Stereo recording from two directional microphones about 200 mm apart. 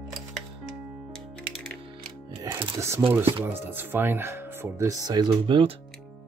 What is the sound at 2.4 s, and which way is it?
Speech, 15° right (ahead or behind).